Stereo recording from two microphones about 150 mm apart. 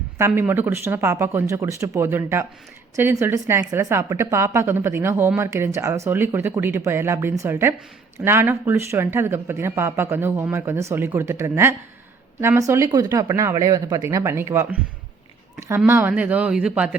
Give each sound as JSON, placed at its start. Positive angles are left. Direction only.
{"t": 0.2, "sound": "speech", "side_deg": -15}
{"t": 15.9, "sound": "speech", "side_deg": -10}